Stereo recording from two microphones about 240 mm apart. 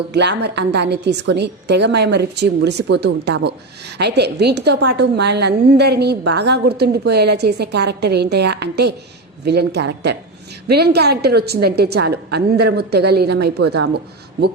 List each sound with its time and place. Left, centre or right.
0.1 s speech: right